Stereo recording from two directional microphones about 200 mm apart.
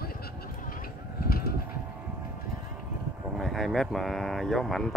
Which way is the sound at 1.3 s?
50° left (ahead or behind).